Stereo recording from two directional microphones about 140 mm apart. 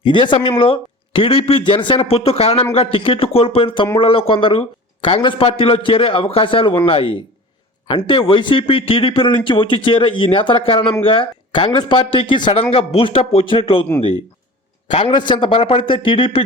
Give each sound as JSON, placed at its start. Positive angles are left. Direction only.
{"t": 0.0, "sound": "a man's voice", "side_deg": 35}
{"t": 14.8, "sound": "a man's voice", "side_deg": 35}